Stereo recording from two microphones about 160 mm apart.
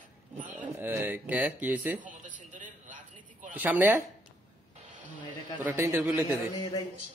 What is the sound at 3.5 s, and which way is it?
Speech, 10° right (ahead or behind).